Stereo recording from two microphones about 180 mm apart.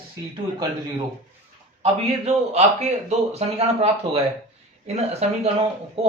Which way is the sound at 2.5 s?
35° right (ahead or behind).